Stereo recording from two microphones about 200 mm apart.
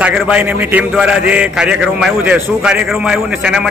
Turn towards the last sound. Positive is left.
turn(degrees=-5)  # may be behind; listen again after turning